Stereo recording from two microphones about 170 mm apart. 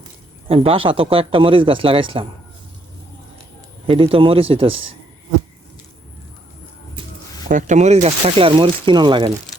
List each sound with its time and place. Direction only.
0.4 s speech: 35° right (ahead or behind)
3.8 s speech: 30° right (ahead or behind)
7.4 s speech: 45° right (ahead or behind); by 9.3 s 25° right (ahead or behind)